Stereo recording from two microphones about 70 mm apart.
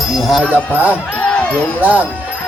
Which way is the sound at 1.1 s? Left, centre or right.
Centre.